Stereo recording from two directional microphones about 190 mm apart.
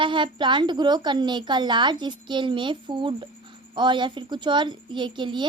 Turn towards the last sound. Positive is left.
turn(degrees=-25)  # may be behind; listen again after turning